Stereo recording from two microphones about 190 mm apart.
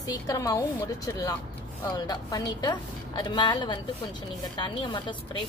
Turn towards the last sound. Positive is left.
turn(degrees=25)  # may be behind; listen again after turning